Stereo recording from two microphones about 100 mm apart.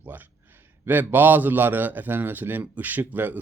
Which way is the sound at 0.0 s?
20° right (ahead or behind).